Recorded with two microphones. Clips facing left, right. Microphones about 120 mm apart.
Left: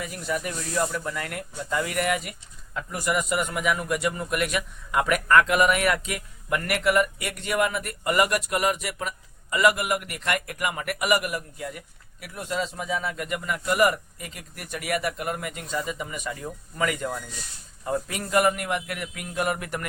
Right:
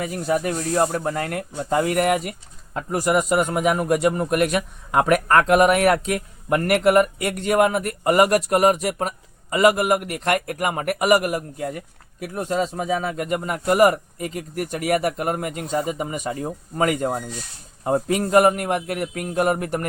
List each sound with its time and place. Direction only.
0.1 s a man's voice: 45° right (ahead or behind)